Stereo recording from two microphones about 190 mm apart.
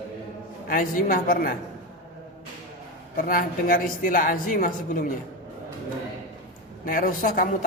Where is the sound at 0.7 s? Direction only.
45° left (ahead or behind).